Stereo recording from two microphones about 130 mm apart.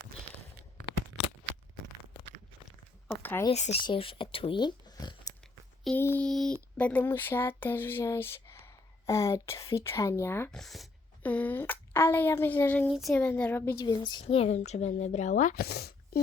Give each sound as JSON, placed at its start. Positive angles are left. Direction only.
{"t": 3.1, "sound": "a sound", "side_deg": 20}
{"t": 3.5, "sound": "speech", "side_deg": 55}
{"t": 3.8, "sound": "speech", "side_deg": 45}
{"t": 6.0, "sound": "speech", "side_deg": 20}
{"t": 6.2, "sound": "speech", "side_deg": 5}
{"t": 6.7, "sound": "speech", "side_deg": 15}
{"t": 10.5, "sound": "speech", "side_deg": 0}
{"t": 11.2, "sound": "speech", "side_deg": 10}
{"t": 12.9, "sound": "speech", "side_deg": 0}
{"t": 13.1, "sound": "speech", "side_deg": 10}
{"t": 13.8, "sound": "a woman's voice", "side_deg": 30}
{"t": 14.3, "sound": "speech", "side_deg": 50}